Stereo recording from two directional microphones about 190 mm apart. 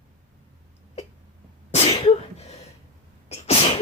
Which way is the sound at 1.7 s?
35° left (ahead or behind).